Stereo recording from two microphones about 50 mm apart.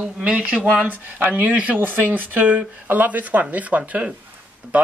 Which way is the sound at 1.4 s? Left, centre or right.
Right.